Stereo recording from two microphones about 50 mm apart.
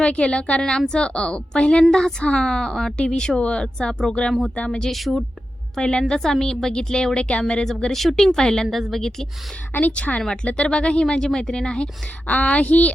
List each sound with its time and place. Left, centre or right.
0.0 s a woman's voice: left
4.9 s speech: centre
5.7 s a woman's voice: centre
8.6 s a woman's voice: centre
8.9 s a woman's voice: centre
9.9 s speech: left
12.3 s speech: left